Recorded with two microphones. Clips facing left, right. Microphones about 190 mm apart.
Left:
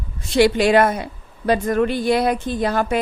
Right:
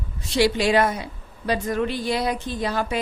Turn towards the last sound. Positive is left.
turn(degrees=55)  # may be behind; listen again after turning